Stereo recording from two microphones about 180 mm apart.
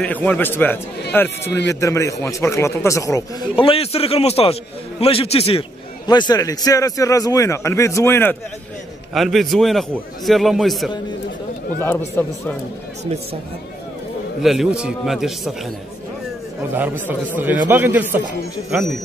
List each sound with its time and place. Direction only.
0.0 s a man's voice: 5° left (ahead or behind)
3.5 s a man's voice: 30° left (ahead or behind)
6.0 s a man's voice: 20° left (ahead or behind)
9.1 s a man's voice: centre (ahead or behind)
11.8 s a man's voice: 10° left (ahead or behind)
14.4 s a man's voice: centre (ahead or behind)
17.4 s a man's voice: 10° right (ahead or behind)